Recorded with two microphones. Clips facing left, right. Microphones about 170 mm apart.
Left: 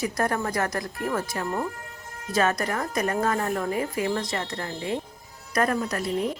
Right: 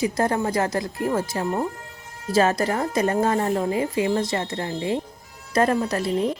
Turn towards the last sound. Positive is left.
turn(degrees=-30)  # may be behind; listen again after turning